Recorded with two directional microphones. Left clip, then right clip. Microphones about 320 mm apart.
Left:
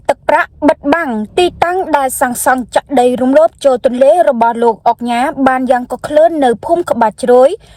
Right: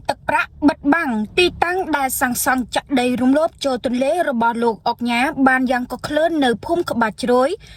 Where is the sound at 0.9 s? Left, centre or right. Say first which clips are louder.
Left 5 dB; left.